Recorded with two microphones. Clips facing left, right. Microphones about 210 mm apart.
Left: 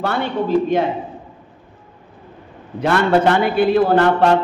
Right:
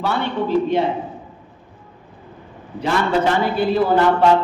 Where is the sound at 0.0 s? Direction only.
50° left (ahead or behind).